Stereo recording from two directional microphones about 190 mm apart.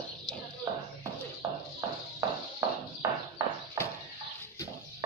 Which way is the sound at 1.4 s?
20° right (ahead or behind).